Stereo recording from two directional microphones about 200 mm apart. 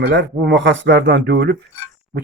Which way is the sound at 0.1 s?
60° right (ahead or behind).